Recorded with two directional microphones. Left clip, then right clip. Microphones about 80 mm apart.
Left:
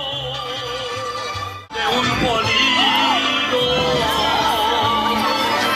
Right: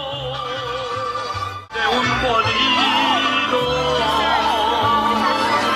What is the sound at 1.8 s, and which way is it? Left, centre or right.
Music, left.